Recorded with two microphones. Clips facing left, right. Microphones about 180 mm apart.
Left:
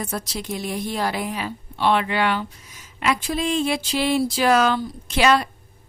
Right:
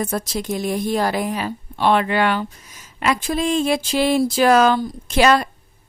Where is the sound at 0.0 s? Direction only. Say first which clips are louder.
Right 5 dB; 45° right (ahead or behind).